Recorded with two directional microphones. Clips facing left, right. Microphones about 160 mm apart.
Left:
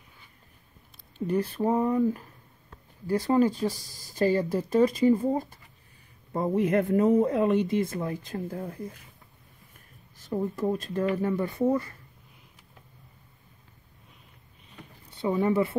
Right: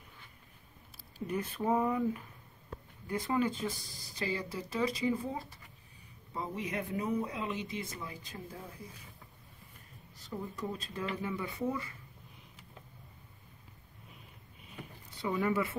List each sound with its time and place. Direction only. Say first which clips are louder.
1.2 s speech: left 8 dB; 35° left (ahead or behind)
3.3 s speech: left 9 dB; 40° left (ahead or behind); by 8.9 s 60° left (ahead or behind)
10.3 s speech: left 11 dB; 45° left (ahead or behind)
15.2 s speech: left 7 dB; 25° left (ahead or behind)